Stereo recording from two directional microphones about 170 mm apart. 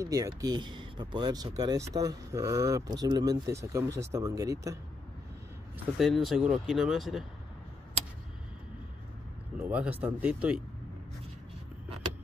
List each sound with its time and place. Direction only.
0.0 s speech: 20° right (ahead or behind)
5.9 s speech: centre (ahead or behind)
9.6 s speech: 10° right (ahead or behind)